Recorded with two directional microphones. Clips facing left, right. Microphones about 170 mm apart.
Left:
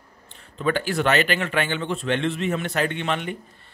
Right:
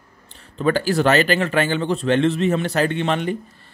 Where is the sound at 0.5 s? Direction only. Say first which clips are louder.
Right 5 dB; 35° right (ahead or behind).